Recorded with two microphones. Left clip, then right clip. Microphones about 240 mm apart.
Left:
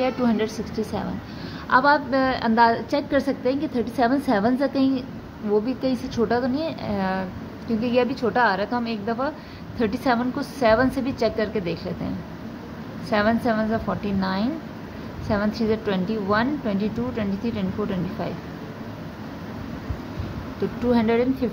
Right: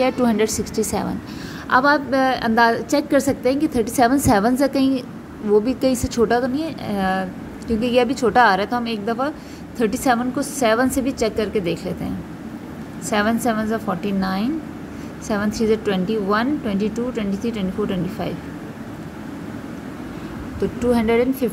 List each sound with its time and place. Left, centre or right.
0.0 s a woman's voice: right
13.1 s a woman's voice: centre
20.8 s a woman's voice: centre